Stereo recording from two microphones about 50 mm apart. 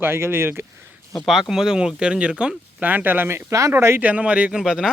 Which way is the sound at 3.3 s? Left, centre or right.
Right.